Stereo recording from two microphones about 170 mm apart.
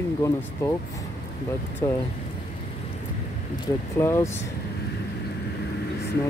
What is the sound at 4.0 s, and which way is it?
Speech, 15° left (ahead or behind).